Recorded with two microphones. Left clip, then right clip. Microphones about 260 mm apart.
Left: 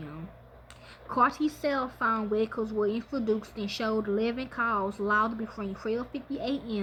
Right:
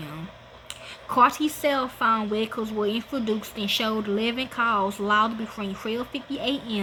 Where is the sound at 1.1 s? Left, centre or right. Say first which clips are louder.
Right 6 dB; centre.